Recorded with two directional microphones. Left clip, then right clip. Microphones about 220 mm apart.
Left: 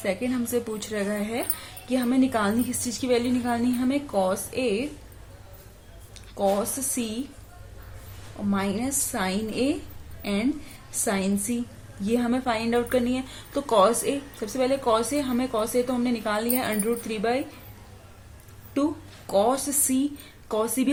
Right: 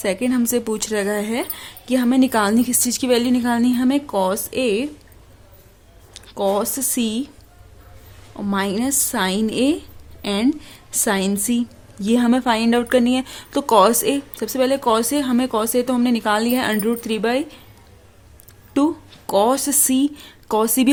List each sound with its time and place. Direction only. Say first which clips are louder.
0.0 s a woman's voice: right 7 dB; 50° right (ahead or behind)
6.1 s speech: right 4 dB; 50° right (ahead or behind)
8.4 s a woman's voice: right 6 dB; 50° right (ahead or behind)
18.8 s a woman's voice: right 7 dB; 50° right (ahead or behind)